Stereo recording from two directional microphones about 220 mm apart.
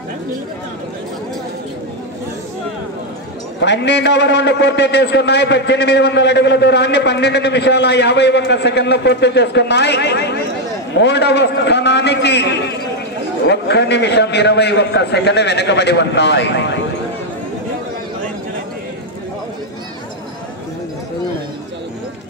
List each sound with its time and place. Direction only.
3.6 s a man's voice: 50° left (ahead or behind)